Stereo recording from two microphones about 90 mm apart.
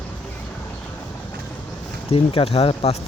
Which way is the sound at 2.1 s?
90° left.